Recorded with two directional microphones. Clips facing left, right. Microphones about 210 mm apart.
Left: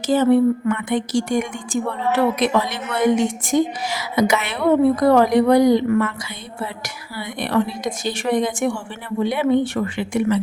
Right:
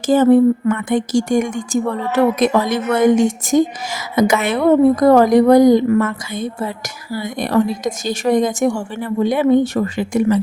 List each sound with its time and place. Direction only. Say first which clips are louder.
0.1 s a woman's voice: right 4 dB; 45° right (ahead or behind)